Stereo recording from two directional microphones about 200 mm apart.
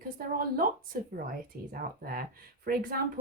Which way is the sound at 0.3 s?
45° right (ahead or behind).